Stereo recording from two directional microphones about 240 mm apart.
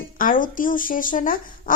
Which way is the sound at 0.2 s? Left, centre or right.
Left.